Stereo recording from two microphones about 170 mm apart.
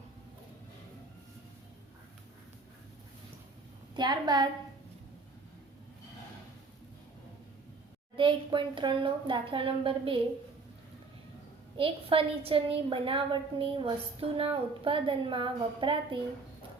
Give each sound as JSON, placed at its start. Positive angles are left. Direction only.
{"t": 3.9, "sound": "a woman's voice", "side_deg": -25}
{"t": 8.1, "sound": "a woman's voice", "side_deg": -30}
{"t": 11.8, "sound": "a woman's voice", "side_deg": -30}